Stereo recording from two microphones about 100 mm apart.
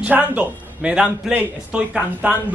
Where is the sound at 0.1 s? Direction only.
10° right (ahead or behind).